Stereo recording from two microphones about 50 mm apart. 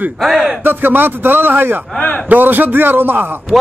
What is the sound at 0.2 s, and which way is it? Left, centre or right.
Speech, centre.